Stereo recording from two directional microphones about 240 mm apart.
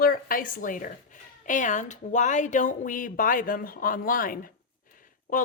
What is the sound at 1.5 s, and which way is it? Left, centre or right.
A woman's voice, left.